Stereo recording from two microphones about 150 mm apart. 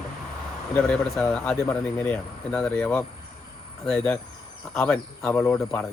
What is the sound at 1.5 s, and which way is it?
Speech, 20° left (ahead or behind).